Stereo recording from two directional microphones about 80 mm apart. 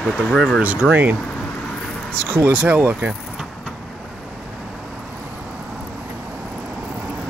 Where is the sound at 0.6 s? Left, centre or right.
Centre.